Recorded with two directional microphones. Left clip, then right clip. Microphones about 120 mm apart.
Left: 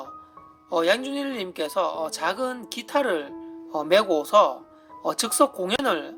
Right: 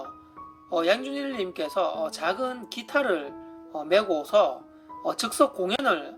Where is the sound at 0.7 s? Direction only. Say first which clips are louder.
Left 2 dB; 40° left (ahead or behind).